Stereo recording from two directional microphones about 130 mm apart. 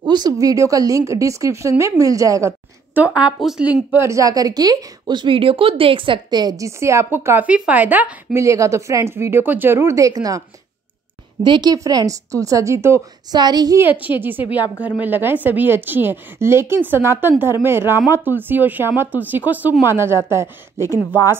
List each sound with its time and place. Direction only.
0.0 s a woman's voice: 35° right (ahead or behind)
3.2 s a woman's voice: 5° right (ahead or behind); by 10.4 s 25° right (ahead or behind)
11.4 s a woman's voice: 35° right (ahead or behind)
13.4 s a woman's voice: 30° right (ahead or behind)
14.1 s a woman's voice: 40° left (ahead or behind)
14.5 s a woman's voice: 15° right (ahead or behind)